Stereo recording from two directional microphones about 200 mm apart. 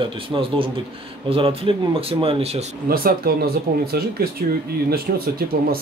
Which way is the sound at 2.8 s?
50° right (ahead or behind).